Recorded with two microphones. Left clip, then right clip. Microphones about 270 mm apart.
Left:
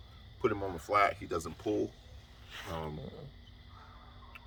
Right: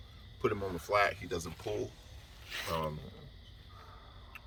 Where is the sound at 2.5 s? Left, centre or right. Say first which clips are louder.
Right 5 dB; right.